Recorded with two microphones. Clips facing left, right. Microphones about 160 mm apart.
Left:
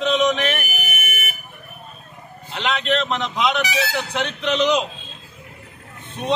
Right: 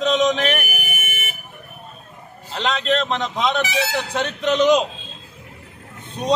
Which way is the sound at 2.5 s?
35° right (ahead or behind).